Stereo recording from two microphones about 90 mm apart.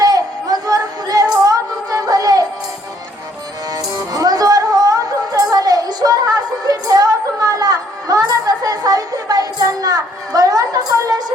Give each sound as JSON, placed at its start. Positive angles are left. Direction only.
{"t": 0.0, "sound": "female singing", "side_deg": -45}
{"t": 3.7, "sound": "music", "side_deg": -45}